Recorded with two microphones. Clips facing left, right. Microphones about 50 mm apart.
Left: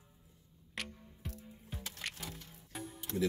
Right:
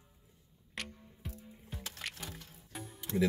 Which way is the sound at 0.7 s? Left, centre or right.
Centre.